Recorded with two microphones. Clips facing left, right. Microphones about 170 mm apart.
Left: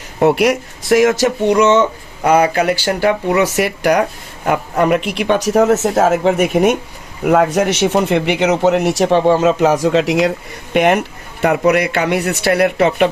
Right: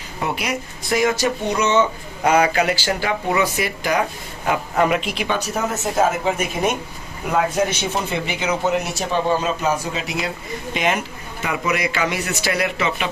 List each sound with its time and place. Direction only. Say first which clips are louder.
0.3 s speech: left 12 dB; 75° left (ahead or behind)
2.6 s speech: left 5 dB; 55° left (ahead or behind)
4.4 s speech: left 4 dB; 50° left (ahead or behind); by 10.3 s 85° left
10.8 s speech: left 10 dB; 65° left (ahead or behind)